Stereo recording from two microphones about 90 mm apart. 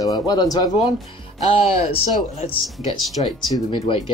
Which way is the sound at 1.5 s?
90° left.